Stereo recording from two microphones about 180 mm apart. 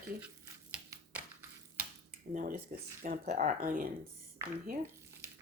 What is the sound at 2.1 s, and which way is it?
Speech, 50° right (ahead or behind).